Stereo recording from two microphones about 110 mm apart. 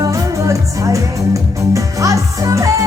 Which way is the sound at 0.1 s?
30° right (ahead or behind).